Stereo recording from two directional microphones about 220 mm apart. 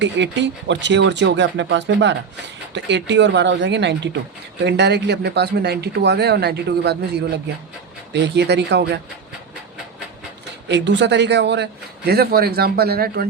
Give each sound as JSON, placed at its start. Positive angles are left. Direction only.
{"t": 0.0, "sound": "a man's voice", "side_deg": -55}
{"t": 8.1, "sound": "a man's voice", "side_deg": -50}
{"t": 10.7, "sound": "a man's voice", "side_deg": -50}